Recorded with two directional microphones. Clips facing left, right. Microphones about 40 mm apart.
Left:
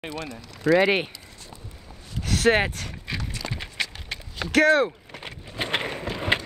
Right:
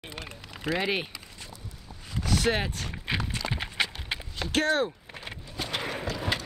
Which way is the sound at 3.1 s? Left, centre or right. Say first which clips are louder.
Right 2 dB; right.